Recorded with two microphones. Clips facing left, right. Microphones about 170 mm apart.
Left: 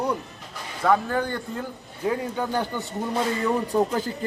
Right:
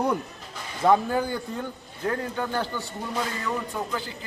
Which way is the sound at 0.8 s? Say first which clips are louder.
Right 1 dB; 15° right (ahead or behind).